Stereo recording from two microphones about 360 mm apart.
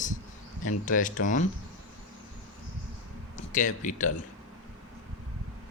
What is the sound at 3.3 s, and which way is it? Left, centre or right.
Speech, left.